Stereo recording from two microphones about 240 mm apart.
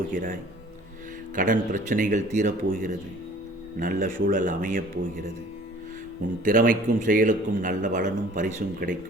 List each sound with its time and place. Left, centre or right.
0.1 s a man's voice: right
1.4 s a man's voice: right
6.4 s a man's voice: right